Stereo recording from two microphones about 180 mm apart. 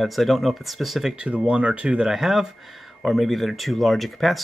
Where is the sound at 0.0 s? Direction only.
Centre (ahead or behind).